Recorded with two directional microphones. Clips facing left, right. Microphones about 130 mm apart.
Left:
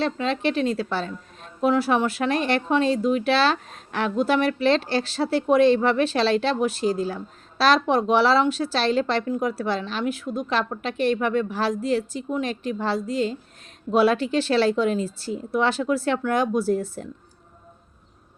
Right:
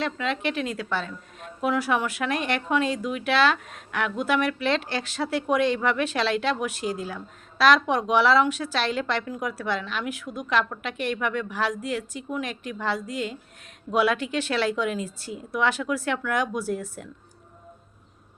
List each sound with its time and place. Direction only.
0.0 s a woman's voice: 30° left (ahead or behind)